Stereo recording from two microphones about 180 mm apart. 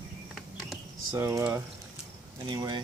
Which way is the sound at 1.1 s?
15° right (ahead or behind).